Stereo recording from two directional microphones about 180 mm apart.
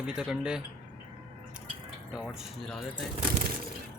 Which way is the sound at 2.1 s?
5° right (ahead or behind).